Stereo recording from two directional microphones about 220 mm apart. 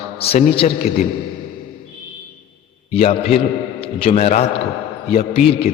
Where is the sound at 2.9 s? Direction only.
25° left (ahead or behind).